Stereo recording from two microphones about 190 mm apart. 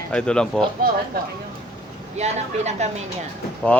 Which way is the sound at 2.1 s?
35° right (ahead or behind).